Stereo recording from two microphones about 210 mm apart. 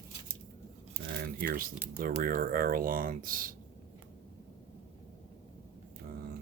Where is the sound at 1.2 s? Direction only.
45° right (ahead or behind).